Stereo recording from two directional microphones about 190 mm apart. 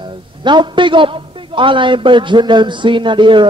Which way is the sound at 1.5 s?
25° right (ahead or behind).